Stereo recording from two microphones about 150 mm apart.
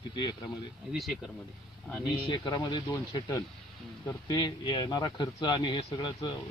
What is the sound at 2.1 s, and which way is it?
Speech, 35° left (ahead or behind).